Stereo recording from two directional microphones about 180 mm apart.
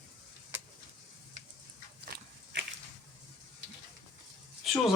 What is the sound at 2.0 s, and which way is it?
Biting, 60° right (ahead or behind).